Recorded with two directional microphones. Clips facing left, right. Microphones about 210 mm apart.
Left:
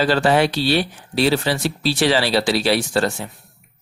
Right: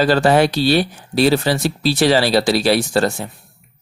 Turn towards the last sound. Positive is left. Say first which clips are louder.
# right 3 dB
turn(degrees=-40)  # may be behind; listen again after turning